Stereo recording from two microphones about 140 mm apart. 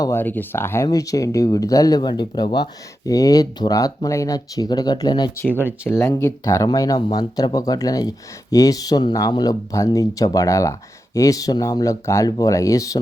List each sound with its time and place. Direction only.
0.0 s speech: 15° left (ahead or behind)
5.5 s speech: 15° right (ahead or behind)
5.9 s speech: 20° left (ahead or behind)